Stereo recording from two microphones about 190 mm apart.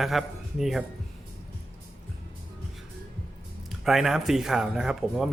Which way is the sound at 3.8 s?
Centre (ahead or behind).